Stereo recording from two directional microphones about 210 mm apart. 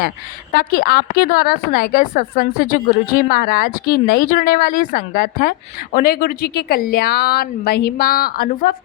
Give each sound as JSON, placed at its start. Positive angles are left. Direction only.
{"t": 0.5, "sound": "a woman's voice", "side_deg": 45}